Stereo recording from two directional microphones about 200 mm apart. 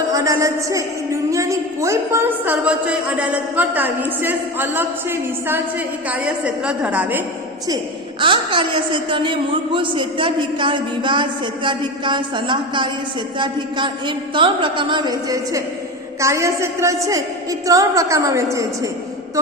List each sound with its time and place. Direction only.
0.1 s a woman's voice: 15° right (ahead or behind)
8.2 s a woman's voice: 25° right (ahead or behind)